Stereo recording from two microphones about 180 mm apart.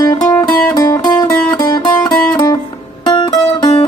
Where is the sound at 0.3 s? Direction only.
20° left (ahead or behind).